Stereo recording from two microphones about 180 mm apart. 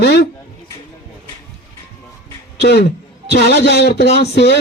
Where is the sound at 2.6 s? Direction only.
65° left (ahead or behind).